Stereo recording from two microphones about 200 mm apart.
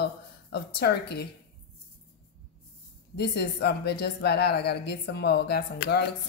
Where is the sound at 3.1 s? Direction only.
55° left (ahead or behind).